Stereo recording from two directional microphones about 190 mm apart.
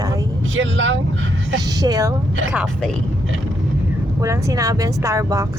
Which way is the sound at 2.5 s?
5° right (ahead or behind).